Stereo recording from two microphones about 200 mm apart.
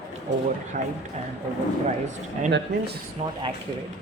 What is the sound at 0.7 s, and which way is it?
Speech, 40° right (ahead or behind).